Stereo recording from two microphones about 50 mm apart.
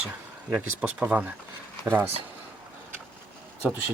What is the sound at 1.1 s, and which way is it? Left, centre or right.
Speech, right.